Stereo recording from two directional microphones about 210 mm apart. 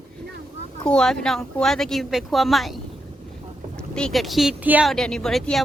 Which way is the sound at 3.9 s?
Centre (ahead or behind).